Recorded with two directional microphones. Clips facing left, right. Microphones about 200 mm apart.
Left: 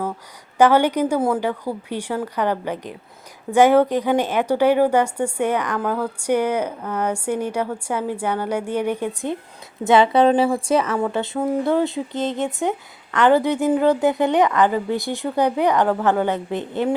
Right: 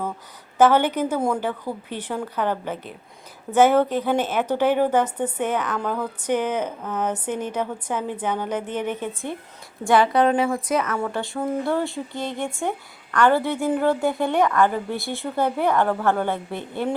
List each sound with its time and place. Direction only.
0.6 s a woman's voice: 10° left (ahead or behind)
9.8 s a woman's voice: 20° left (ahead or behind)